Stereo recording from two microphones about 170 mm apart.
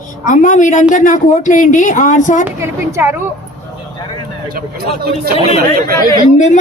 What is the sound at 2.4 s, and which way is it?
Speech, 15° right (ahead or behind).